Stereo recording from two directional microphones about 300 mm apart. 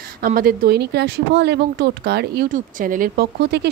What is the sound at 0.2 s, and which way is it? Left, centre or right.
Speech, right.